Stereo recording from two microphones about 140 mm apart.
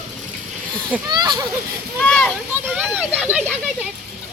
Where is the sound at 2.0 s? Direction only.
5° left (ahead or behind).